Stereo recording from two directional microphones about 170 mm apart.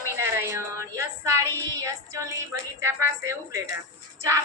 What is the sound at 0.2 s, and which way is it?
A woman's voice, 15° right (ahead or behind).